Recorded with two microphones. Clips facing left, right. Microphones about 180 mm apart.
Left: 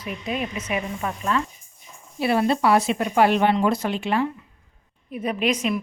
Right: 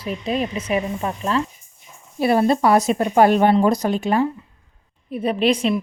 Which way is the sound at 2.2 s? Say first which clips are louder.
Right 4 dB; 45° right (ahead or behind).